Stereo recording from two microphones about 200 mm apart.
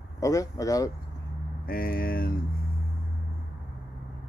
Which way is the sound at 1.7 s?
45° left (ahead or behind).